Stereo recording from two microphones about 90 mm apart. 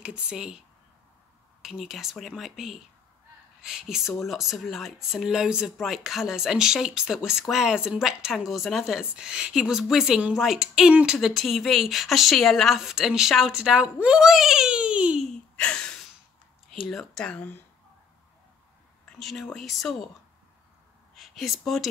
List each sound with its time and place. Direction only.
0.0 s speech: 10° right (ahead or behind)
1.6 s speech: 5° right (ahead or behind)
15.5 s a sound: 10° left (ahead or behind)
16.7 s speech: centre (ahead or behind)
17.2 s speech: 15° left (ahead or behind)
19.1 s speech: centre (ahead or behind)
21.2 s speech: centre (ahead or behind)